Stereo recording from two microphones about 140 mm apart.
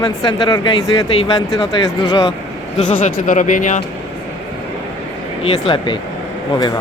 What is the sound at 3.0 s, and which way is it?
Speech, 65° left (ahead or behind).